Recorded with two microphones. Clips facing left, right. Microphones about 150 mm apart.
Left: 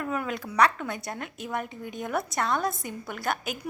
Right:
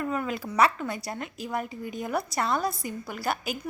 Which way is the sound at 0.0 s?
Centre (ahead or behind).